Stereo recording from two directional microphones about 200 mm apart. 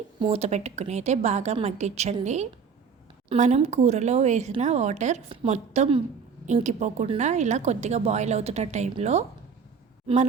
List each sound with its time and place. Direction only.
0.2 s a woman's voice: 30° right (ahead or behind)